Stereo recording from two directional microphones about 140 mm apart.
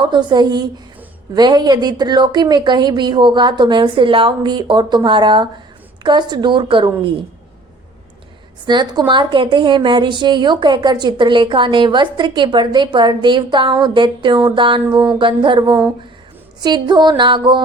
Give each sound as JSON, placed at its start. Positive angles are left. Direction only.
{"t": 0.0, "sound": "a woman's voice", "side_deg": -30}
{"t": 8.6, "sound": "a woman's voice", "side_deg": -30}